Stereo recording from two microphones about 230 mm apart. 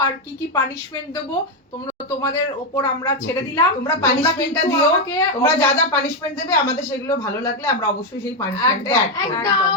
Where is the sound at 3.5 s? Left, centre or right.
Centre.